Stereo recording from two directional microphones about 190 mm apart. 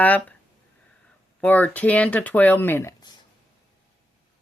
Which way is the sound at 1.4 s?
10° left (ahead or behind).